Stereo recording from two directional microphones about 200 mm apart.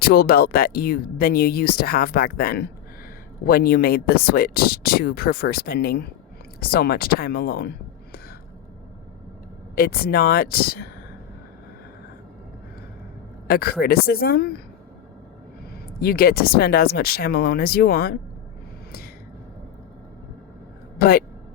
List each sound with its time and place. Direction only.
0.0 s speech: 50° left (ahead or behind)
9.7 s speech: 50° left (ahead or behind)
13.5 s speech: 50° left (ahead or behind)
15.7 s speech: 50° left (ahead or behind)
21.0 s speech: 50° left (ahead or behind)